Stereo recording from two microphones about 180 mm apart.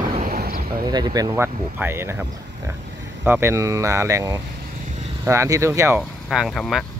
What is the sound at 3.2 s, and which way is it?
Speech, 10° right (ahead or behind).